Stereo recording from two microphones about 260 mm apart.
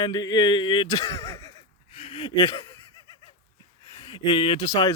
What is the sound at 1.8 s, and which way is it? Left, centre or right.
Laughter, left.